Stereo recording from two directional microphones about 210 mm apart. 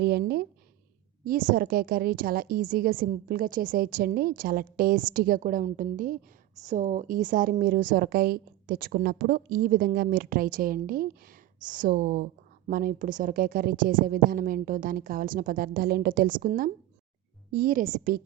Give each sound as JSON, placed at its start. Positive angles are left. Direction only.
{"t": 0.0, "sound": "a woman's voice", "side_deg": -50}